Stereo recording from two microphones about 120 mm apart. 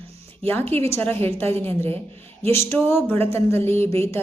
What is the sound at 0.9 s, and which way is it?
Speech, 20° left (ahead or behind).